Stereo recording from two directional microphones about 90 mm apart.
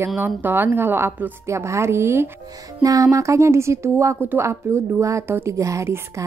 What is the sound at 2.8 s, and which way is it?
A woman's voice, 40° right (ahead or behind).